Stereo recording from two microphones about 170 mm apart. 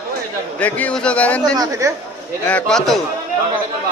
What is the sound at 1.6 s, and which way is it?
Speech, 20° right (ahead or behind).